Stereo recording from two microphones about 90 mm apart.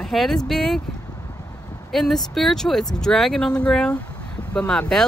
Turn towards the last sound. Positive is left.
turn(degrees=5)  # may be behind; listen again after turning